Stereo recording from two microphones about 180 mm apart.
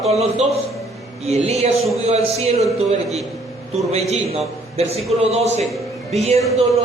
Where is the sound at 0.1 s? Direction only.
35° right (ahead or behind).